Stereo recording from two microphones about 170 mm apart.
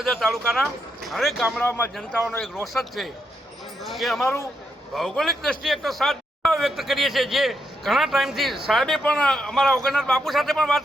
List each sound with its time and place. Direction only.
0.0 s speech: centre (ahead or behind)
1.5 s speech: 10° left (ahead or behind)
2.7 s speech: centre (ahead or behind)
4.2 s speech: 15° left (ahead or behind)
4.9 s speech: centre (ahead or behind)